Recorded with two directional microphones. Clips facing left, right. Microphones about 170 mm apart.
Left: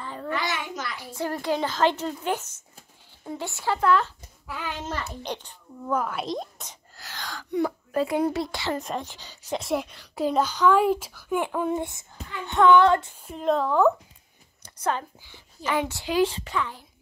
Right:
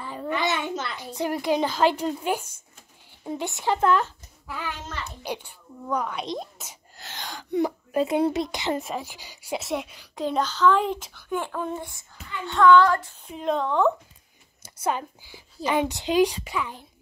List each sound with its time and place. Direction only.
0.0 s a child's voice: 15° right (ahead or behind)
5.2 s a woman's voice: 10° right (ahead or behind)
5.9 s a child's voice: 5° left (ahead or behind)
7.0 s a sound: 20° right (ahead or behind)
8.8 s a woman's voice: 10° right (ahead or behind)
10.1 s speech: 5° left (ahead or behind); by 13.1 s 20° left (ahead or behind)
13.2 s a child's voice: centre (ahead or behind)
14.6 s a woman's voice: 10° right (ahead or behind)